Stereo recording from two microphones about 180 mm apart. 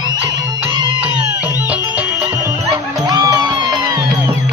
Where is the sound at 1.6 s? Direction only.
5° right (ahead or behind).